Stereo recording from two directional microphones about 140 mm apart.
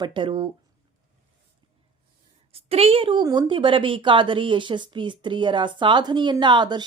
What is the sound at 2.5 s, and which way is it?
A woman's voice, 45° right (ahead or behind).